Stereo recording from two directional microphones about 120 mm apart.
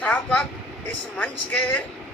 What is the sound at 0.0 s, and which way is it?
Vehicle, 10° left (ahead or behind).